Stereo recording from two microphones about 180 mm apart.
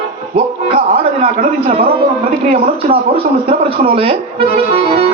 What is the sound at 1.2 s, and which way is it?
Speech, 45° right (ahead or behind).